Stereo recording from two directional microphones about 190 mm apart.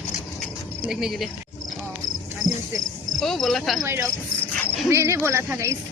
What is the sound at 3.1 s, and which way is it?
Speech, centre (ahead or behind).